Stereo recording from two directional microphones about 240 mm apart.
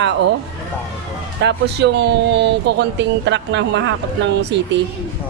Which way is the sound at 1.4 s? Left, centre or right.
Right.